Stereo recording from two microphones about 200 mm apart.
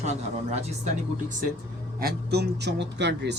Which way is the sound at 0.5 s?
35° right (ahead or behind).